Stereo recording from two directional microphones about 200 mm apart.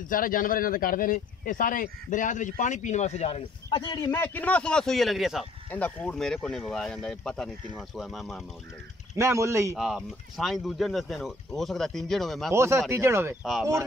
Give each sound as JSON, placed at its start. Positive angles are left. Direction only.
{"t": 0.1, "sound": "speech", "side_deg": 45}
{"t": 9.1, "sound": "speech", "side_deg": -15}
{"t": 9.8, "sound": "speech", "side_deg": 0}
{"t": 12.5, "sound": "speech", "side_deg": -15}